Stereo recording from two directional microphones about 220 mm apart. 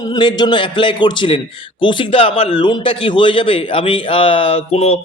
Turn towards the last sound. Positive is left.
turn(degrees=25)  # may be behind; listen again after turning